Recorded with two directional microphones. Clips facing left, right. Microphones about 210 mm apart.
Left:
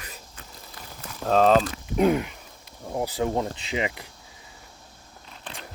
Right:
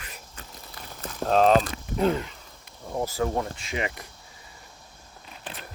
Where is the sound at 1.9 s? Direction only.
15° left (ahead or behind).